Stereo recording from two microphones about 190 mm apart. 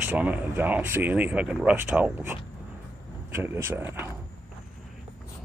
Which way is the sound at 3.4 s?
10° right (ahead or behind).